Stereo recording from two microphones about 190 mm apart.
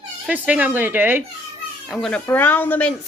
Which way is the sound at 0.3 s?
10° right (ahead or behind).